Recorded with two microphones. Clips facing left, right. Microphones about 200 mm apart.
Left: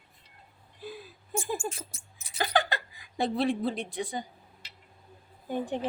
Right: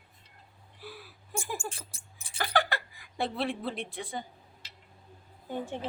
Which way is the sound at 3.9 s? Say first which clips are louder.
Left 4 dB; 15° left (ahead or behind).